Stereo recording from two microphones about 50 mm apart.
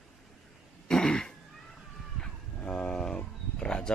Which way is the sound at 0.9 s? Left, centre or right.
Centre.